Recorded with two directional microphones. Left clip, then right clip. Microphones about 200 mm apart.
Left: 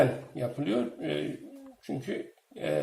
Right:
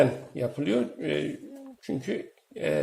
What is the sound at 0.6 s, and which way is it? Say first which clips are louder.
Speech: right 3 dB; 50° right (ahead or behind).